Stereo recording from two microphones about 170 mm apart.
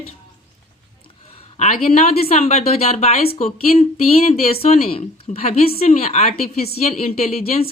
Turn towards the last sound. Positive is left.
turn(degrees=35)  # may be behind; listen again after turning